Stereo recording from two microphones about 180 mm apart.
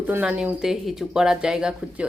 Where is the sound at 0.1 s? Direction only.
5° right (ahead or behind).